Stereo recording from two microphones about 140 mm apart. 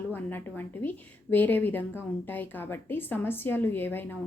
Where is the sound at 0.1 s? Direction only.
15° left (ahead or behind).